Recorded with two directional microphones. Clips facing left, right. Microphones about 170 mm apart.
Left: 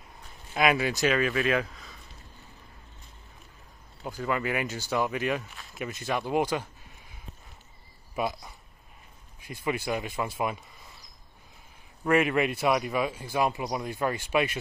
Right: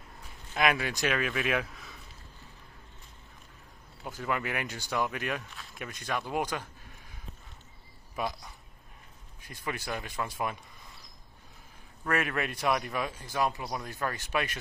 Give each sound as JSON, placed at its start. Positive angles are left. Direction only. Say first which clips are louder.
{"t": 0.6, "sound": "speech", "louder": "left 4 dB", "side_deg": 5}
{"t": 4.0, "sound": "speech", "louder": "left 3 dB", "side_deg": 0}
{"t": 9.4, "sound": "a man's voice", "louder": "left 6 dB", "side_deg": 10}
{"t": 12.0, "sound": "a man's voice", "louder": "left 7 dB", "side_deg": 10}